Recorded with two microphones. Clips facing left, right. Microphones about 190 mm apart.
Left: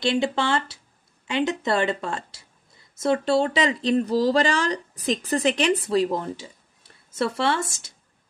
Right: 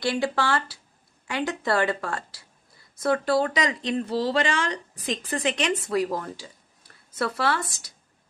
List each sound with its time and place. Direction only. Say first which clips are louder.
0.0 s a woman's voice: left 2 dB; 20° left (ahead or behind)